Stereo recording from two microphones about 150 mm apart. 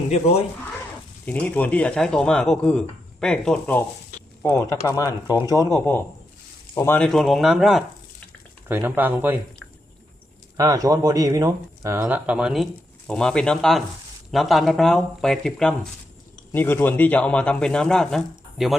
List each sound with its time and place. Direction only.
1.2 s speech: 10° left (ahead or behind)
4.6 s speech: 20° left (ahead or behind)
7.1 s speech: centre (ahead or behind)
8.6 s speech: 15° right (ahead or behind)
10.6 s speech: 20° right (ahead or behind)
12.0 s speech: 10° right (ahead or behind)
16.5 s speech: 15° left (ahead or behind); by 18.8 s centre (ahead or behind)